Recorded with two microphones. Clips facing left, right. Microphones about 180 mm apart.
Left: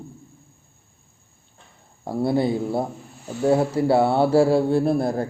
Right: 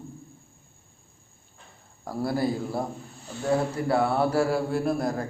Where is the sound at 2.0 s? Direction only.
25° left (ahead or behind).